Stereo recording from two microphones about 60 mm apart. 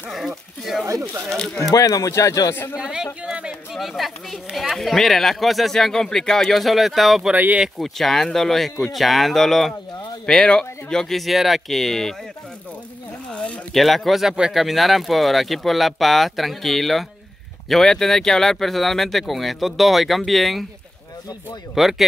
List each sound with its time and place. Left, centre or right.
0.1 s a sound: centre
0.8 s speech: right
1.3 s speech: centre
1.6 s speech: left
2.5 s speech: left
2.8 s speech: centre
3.3 s a sound: centre
3.7 s speech: centre
10.2 s speech: centre
13.7 s speech: centre
21.7 s speech: centre